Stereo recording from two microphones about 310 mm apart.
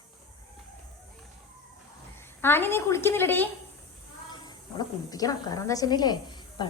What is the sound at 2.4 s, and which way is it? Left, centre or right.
A woman's voice, centre.